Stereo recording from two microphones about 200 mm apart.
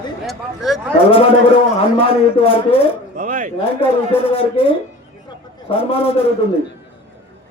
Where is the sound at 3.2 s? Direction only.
40° right (ahead or behind).